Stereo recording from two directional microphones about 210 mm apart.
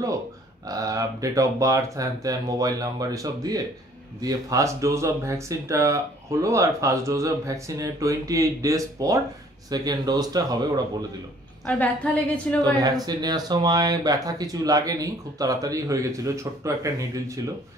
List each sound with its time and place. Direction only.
0.7 s a man's voice: 15° right (ahead or behind)
11.6 s a woman's voice: 5° left (ahead or behind)
12.8 s speech: 20° right (ahead or behind)